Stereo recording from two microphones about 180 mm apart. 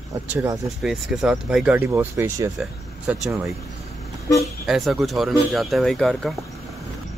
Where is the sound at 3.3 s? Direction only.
15° right (ahead or behind).